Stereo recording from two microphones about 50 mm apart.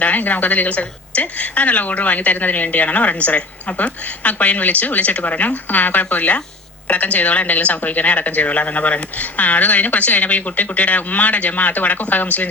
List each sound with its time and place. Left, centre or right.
0.0 s a woman's voice: left